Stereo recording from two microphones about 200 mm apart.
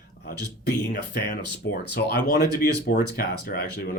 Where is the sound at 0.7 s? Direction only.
50° left (ahead or behind).